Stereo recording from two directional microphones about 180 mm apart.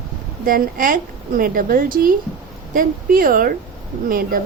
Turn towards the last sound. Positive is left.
turn(degrees=-50)  # may be behind; listen again after turning